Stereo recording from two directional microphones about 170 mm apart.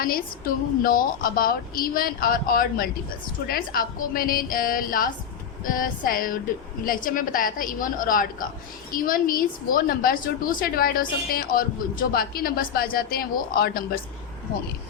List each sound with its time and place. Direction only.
0.0 s a woman's voice: 60° left (ahead or behind)